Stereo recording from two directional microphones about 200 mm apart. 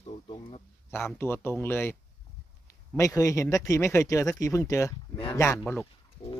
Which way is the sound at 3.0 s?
15° left (ahead or behind).